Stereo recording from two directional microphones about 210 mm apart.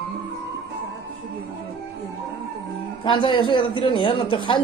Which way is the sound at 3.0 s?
25° left (ahead or behind).